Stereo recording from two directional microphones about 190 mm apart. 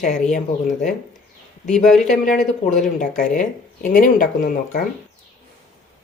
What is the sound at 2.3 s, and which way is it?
Speech, 40° left (ahead or behind).